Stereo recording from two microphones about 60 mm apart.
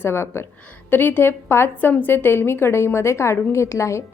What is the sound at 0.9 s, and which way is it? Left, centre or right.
A woman's voice, left.